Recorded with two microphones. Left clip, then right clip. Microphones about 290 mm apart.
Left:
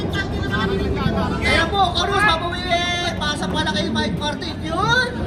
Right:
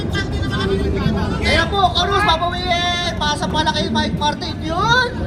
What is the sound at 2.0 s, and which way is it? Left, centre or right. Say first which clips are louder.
Vehicle: right 2 dB; centre.